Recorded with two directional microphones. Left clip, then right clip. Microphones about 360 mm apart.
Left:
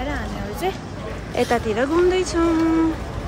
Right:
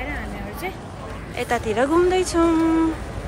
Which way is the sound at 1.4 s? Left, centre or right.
Centre.